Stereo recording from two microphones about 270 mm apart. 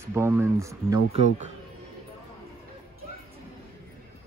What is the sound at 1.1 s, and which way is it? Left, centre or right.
Speech, right.